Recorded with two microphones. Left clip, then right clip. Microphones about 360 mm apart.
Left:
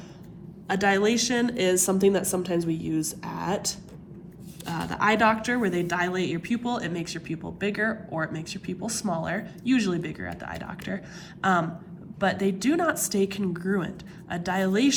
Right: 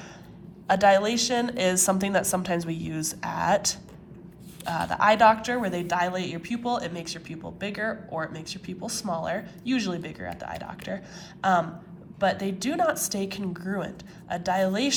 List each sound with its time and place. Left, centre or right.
0.7 s a woman's voice: centre